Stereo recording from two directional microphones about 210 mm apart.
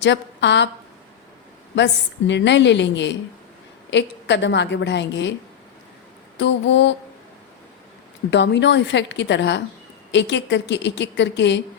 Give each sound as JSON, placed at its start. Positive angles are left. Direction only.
{"t": 0.0, "sound": "a woman's voice", "side_deg": 55}
{"t": 1.7, "sound": "a woman's voice", "side_deg": 60}
{"t": 6.3, "sound": "a woman's voice", "side_deg": 60}
{"t": 8.3, "sound": "a woman's voice", "side_deg": 60}